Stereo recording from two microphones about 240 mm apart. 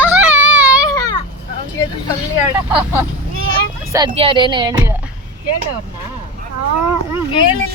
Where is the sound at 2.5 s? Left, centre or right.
Centre.